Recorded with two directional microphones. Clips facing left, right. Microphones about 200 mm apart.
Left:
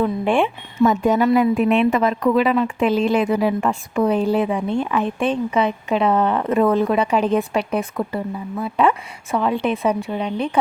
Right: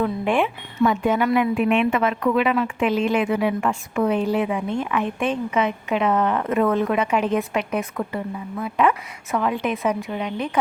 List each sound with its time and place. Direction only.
0.0 s a woman's voice: 30° left (ahead or behind)
0.9 s a woman's voice: 40° left (ahead or behind)